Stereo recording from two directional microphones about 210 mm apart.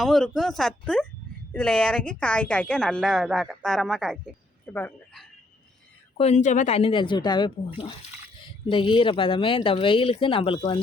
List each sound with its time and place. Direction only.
0.0 s speech: centre (ahead or behind)
4.6 s a sound: 10° left (ahead or behind)
6.1 s speech: 30° left (ahead or behind)